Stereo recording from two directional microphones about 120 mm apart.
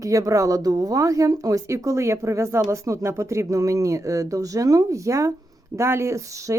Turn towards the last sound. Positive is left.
turn(degrees=-25)  # may be behind; listen again after turning